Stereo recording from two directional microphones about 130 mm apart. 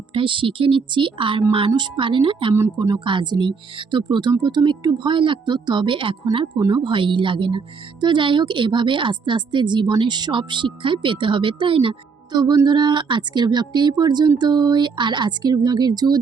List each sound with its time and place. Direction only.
0.1 s a woman's voice: 40° right (ahead or behind)